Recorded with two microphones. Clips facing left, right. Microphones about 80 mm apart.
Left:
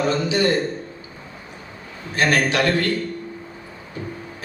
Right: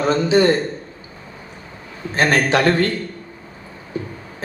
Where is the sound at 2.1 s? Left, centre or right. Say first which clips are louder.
Right 3 dB; right.